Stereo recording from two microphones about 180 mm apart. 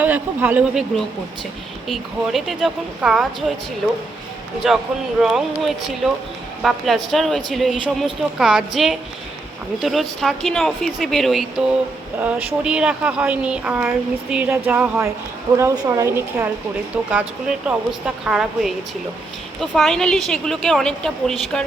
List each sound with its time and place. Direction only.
0.0 s speech: 10° right (ahead or behind)
4.6 s speech: centre (ahead or behind)